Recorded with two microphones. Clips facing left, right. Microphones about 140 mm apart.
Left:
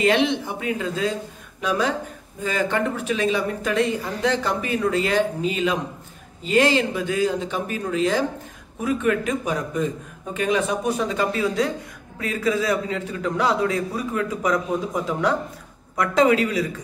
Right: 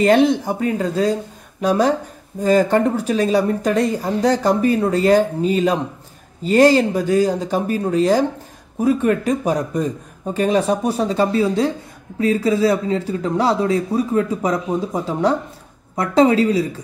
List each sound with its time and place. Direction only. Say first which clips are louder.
0.0 s speech: right 6 dB; 40° right (ahead or behind)